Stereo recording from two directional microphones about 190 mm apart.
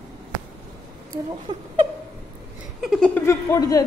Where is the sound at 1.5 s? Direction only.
20° right (ahead or behind).